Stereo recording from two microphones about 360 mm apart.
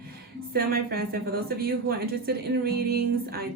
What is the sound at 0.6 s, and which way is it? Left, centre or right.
A woman's voice, right.